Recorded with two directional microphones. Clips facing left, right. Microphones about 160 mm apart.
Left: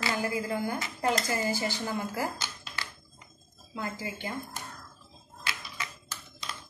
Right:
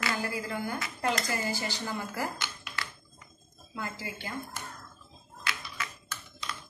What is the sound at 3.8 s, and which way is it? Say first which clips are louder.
Speech: left 2 dB; 20° left (ahead or behind).